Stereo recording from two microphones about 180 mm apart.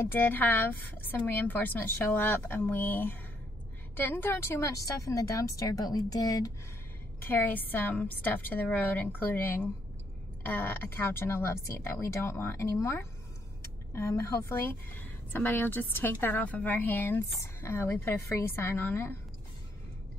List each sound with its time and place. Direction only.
0.0 s speech: 10° left (ahead or behind)